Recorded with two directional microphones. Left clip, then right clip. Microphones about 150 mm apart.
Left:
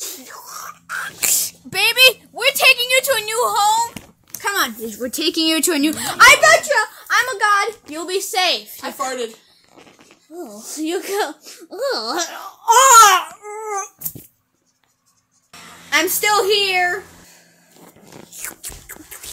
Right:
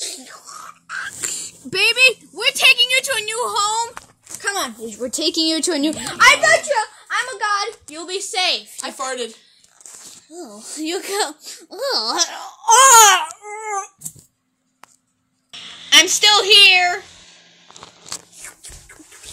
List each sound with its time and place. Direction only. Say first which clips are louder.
0.3 s whispering: left 3 dB; 25° left (ahead or behind)
1.2 s a sound: left 8 dB; 50° left (ahead or behind)
1.7 s a sound: left 1 dB; 30° left (ahead or behind)
5.1 s a woman's voice: left 1 dB; 60° left (ahead or behind); by 5.9 s 90° left
5.9 s a child's voice: left 3 dB; 30° left (ahead or behind)
7.1 s a sound: left 8 dB; 45° left (ahead or behind)
7.9 s a woman's voice: left 3 dB; 30° left (ahead or behind)
8.8 s speech: left 3 dB; 45° right (ahead or behind)
10.4 s speech: left 2 dB; 10° right (ahead or behind)
15.9 s a woman's voice: right 5 dB; 5° left (ahead or behind)
18.3 s biting: left 5 dB; 45° left (ahead or behind)